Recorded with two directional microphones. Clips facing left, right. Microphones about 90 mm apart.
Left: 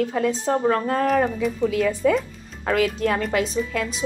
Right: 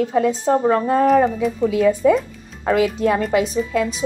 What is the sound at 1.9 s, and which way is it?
A woman's voice, 5° right (ahead or behind).